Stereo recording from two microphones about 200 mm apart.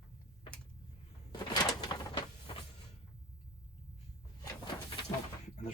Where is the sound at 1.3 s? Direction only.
20° left (ahead or behind).